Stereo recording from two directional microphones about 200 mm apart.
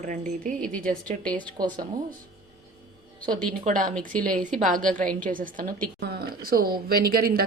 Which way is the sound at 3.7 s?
40° right (ahead or behind).